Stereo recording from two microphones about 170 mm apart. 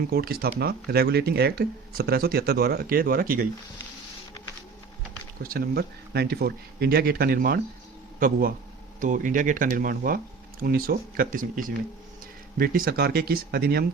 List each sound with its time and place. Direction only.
0.1 s speech: 65° right (ahead or behind)
5.4 s speech: 60° right (ahead or behind)